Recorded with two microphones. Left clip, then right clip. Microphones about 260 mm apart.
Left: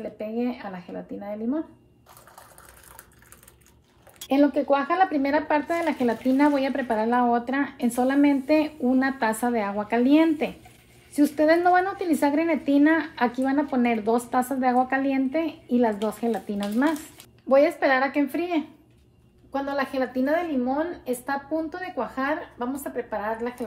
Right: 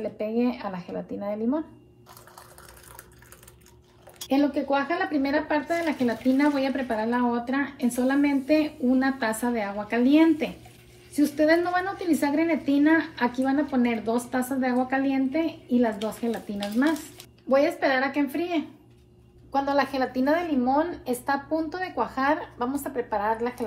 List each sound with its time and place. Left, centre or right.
0.0 s a woman's voice: centre
4.3 s a woman's voice: left
19.5 s a woman's voice: centre